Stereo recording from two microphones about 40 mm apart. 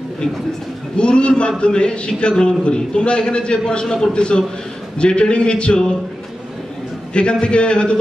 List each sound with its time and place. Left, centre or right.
0.9 s a man's voice: left
7.2 s a man's voice: left